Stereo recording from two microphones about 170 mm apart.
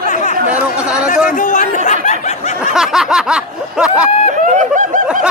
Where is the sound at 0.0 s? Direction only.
45° left (ahead or behind).